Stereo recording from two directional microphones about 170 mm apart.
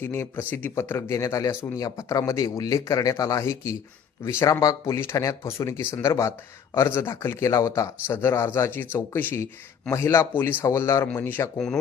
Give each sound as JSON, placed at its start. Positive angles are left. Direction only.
{"t": 0.0, "sound": "speech", "side_deg": 15}